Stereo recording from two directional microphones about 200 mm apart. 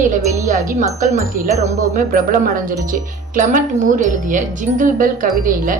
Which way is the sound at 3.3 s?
40° right (ahead or behind).